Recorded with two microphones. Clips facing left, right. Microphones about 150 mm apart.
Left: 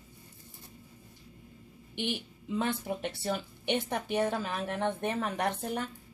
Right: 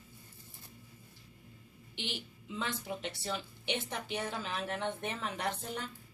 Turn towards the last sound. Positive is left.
turn(degrees=55)  # may be behind; listen again after turning